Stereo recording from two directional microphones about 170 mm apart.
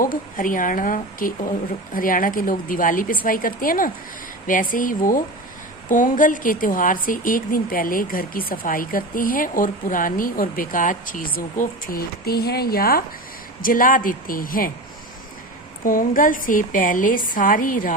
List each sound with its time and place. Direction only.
0.0 s a woman's voice: 55° left (ahead or behind)
15.8 s a woman's voice: 55° left (ahead or behind)